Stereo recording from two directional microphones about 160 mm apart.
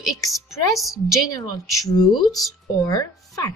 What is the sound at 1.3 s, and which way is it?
Speech, 20° left (ahead or behind).